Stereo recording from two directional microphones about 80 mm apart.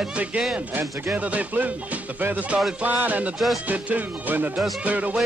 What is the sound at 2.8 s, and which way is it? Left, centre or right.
Music, centre.